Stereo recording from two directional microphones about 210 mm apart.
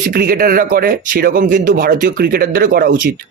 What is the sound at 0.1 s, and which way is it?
Speech, 45° right (ahead or behind).